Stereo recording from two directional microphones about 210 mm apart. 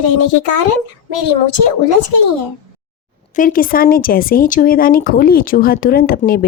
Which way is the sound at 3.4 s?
40° left (ahead or behind).